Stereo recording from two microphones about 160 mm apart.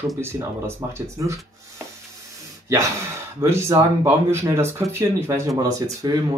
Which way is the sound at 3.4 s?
15° right (ahead or behind).